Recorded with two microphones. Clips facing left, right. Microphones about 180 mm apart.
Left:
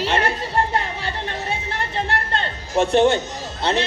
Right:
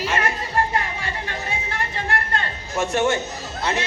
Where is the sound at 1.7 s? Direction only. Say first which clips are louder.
Left 1 dB; 30° left (ahead or behind).